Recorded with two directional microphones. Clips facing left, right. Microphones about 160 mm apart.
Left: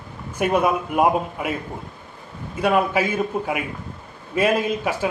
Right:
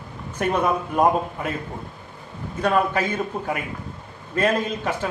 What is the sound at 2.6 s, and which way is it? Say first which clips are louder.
A man's voice: left 2 dB; 10° left (ahead or behind).